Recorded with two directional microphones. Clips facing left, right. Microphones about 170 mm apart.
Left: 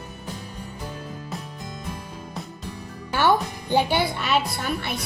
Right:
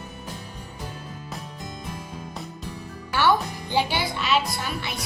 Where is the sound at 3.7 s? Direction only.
50° left (ahead or behind).